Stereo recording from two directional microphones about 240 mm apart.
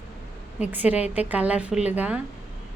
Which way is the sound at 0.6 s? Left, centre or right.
Centre.